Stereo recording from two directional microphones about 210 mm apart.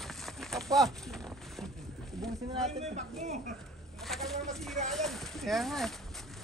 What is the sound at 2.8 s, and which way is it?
Speech, 35° right (ahead or behind).